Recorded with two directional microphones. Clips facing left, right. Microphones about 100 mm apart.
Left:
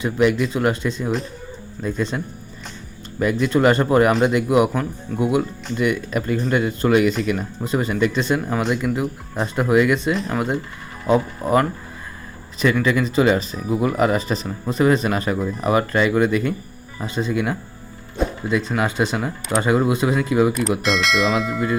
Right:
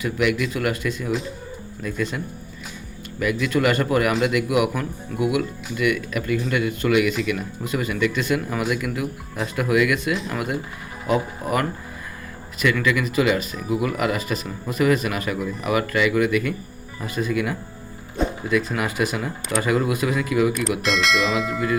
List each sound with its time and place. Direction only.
0.0 s speech: 30° left (ahead or behind)
12.8 s speech: 30° left (ahead or behind)
18.2 s music: centre (ahead or behind)
18.8 s speech: 25° left (ahead or behind)
20.8 s speech: centre (ahead or behind)